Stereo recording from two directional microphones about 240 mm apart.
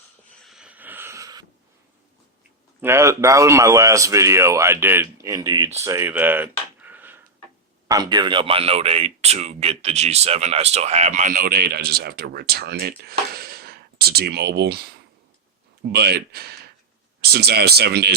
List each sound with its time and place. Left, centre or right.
0.4 s snort: centre
2.8 s speech: centre
5.8 s a sound: centre
7.9 s speech: centre; by 18.1 s right